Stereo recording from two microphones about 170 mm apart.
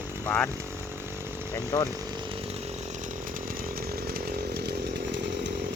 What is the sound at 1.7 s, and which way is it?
Speech, 15° left (ahead or behind).